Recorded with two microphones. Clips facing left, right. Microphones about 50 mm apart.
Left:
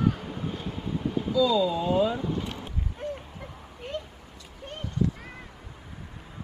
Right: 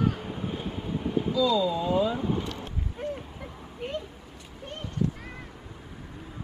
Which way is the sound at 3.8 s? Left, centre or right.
Centre.